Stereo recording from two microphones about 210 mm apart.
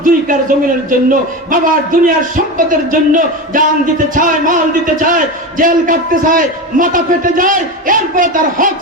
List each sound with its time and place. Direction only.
0.0 s a man's voice: 40° right (ahead or behind)